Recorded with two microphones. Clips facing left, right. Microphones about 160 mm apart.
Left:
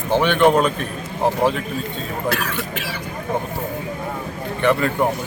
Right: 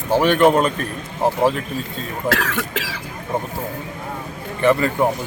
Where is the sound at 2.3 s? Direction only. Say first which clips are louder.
Right 3 dB; 90° right.